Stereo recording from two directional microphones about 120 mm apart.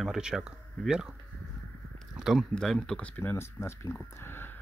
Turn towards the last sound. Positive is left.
turn(degrees=20)  # may be behind; listen again after turning